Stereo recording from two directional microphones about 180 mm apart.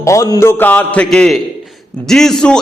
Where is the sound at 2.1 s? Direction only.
5° left (ahead or behind).